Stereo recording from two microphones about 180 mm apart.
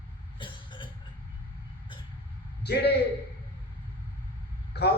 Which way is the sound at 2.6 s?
65° left (ahead or behind).